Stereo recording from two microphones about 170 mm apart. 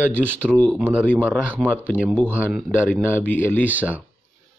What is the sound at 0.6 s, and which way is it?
Speech, 5° left (ahead or behind).